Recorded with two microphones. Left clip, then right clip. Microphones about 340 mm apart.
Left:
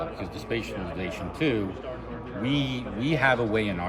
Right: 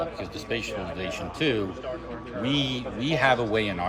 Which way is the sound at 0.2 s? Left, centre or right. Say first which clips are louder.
Right 1 dB; centre.